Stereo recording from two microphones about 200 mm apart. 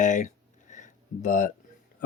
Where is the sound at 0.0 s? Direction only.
40° left (ahead or behind).